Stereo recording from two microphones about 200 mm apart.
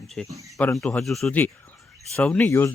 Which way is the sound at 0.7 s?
Centre (ahead or behind).